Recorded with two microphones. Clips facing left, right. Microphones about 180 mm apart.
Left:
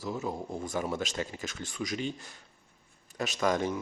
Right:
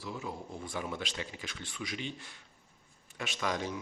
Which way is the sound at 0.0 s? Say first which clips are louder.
Left 6 dB; 40° left (ahead or behind).